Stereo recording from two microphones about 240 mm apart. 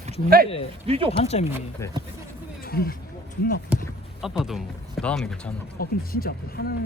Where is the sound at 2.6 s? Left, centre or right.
Left.